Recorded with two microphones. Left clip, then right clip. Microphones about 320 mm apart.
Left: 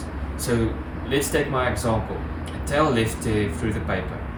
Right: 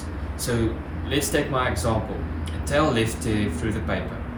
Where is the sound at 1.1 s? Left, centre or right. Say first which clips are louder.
Left 1 dB; centre.